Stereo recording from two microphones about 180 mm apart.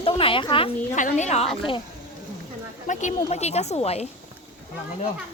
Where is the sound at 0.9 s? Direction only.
40° left (ahead or behind).